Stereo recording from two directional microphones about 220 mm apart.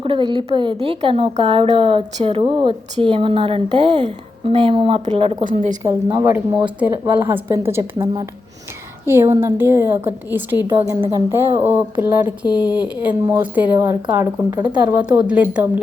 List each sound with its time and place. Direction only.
0.0 s a woman's voice: 25° right (ahead or behind)
7.9 s speech: 25° right (ahead or behind)
9.0 s a woman's voice: 10° right (ahead or behind)
15.3 s a woman's voice: 5° right (ahead or behind)